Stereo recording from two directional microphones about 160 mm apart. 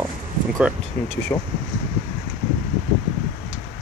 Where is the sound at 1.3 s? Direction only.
15° left (ahead or behind).